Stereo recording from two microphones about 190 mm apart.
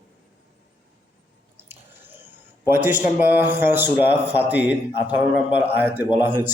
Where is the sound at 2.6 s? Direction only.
10° right (ahead or behind).